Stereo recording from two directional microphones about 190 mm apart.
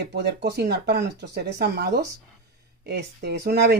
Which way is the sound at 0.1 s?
60° right (ahead or behind).